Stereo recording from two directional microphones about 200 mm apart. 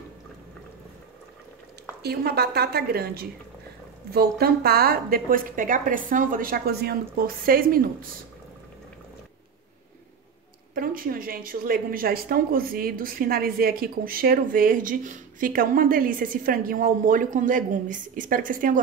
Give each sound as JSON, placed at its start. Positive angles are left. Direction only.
{"t": 2.0, "sound": "a woman's voice", "side_deg": -50}
{"t": 10.7, "sound": "a woman's voice", "side_deg": -45}